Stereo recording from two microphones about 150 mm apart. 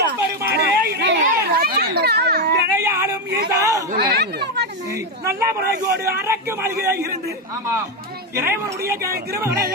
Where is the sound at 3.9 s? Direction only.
90° right.